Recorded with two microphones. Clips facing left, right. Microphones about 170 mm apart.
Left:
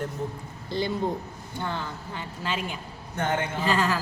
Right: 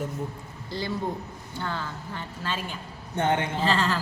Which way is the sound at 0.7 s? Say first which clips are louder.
Left 3 dB; 20° left (ahead or behind).